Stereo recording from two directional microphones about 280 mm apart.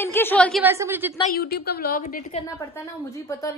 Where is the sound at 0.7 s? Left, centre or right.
Centre.